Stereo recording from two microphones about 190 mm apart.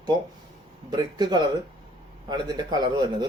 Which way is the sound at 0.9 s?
20° right (ahead or behind).